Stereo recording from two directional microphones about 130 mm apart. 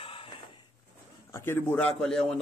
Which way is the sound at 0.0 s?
40° left (ahead or behind).